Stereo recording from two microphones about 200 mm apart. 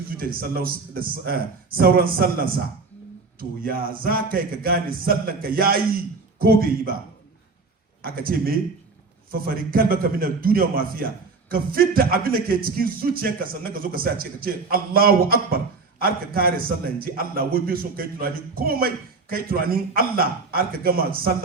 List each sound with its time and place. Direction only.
0.2 s speech: 50° right (ahead or behind)
8.0 s speech: 50° right (ahead or behind)